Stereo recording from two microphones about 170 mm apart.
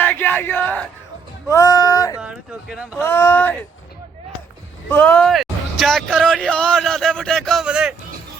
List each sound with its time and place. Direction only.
0.0 s a sound: 10° left (ahead or behind)
1.5 s speech: 20° left (ahead or behind)
2.2 s speech: 5° right (ahead or behind)
3.0 s speech: 15° left (ahead or behind)
4.9 s a man's voice: 10° left (ahead or behind)